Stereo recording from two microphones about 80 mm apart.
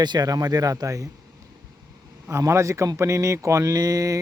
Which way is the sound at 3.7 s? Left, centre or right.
Right.